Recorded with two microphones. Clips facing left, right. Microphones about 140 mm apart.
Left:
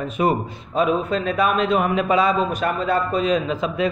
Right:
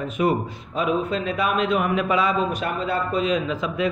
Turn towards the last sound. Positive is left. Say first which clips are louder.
# left 2 dB
turn(degrees=30)  # may be behind; listen again after turning